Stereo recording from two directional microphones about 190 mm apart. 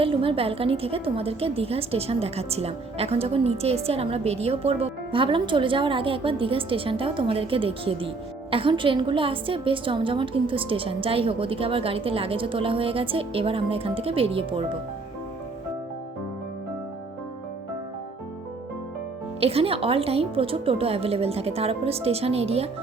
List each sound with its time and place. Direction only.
0.0 s a woman's voice: 30° right (ahead or behind)
19.4 s a woman's voice: 30° right (ahead or behind)